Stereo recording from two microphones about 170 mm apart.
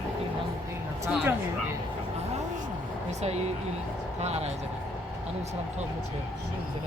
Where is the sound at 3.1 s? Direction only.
40° right (ahead or behind).